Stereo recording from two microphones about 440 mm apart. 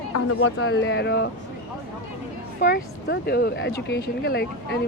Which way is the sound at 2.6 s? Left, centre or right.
Left.